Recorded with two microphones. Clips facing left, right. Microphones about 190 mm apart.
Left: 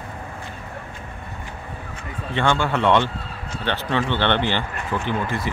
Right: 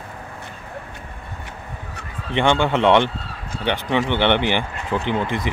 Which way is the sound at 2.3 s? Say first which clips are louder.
Right 3 dB; 20° right (ahead or behind).